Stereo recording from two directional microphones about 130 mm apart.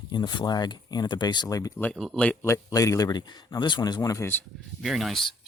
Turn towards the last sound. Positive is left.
turn(degrees=0)  # may be behind; listen again after turning